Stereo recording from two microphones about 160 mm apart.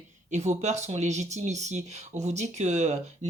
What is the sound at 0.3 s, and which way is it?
Speech, 45° right (ahead or behind).